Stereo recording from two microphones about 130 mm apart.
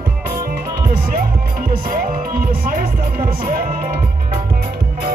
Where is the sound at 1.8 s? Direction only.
90° right.